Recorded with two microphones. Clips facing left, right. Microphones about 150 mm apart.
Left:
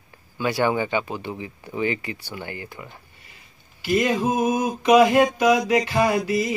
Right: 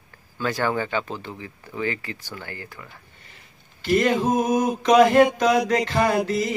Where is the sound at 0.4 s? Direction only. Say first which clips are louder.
Left 2 dB; 15° left (ahead or behind).